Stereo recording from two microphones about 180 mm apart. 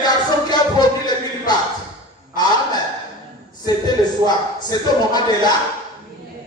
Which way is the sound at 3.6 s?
25° left (ahead or behind).